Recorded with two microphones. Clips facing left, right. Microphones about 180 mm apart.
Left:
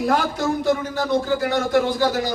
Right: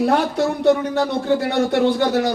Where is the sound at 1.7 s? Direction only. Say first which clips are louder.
Right 1 dB; 65° right (ahead or behind).